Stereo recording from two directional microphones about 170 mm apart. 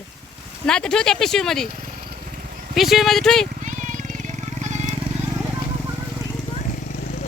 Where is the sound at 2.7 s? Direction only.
Centre (ahead or behind).